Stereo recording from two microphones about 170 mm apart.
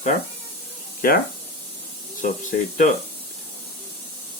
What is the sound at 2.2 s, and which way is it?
Speech, 50° left (ahead or behind).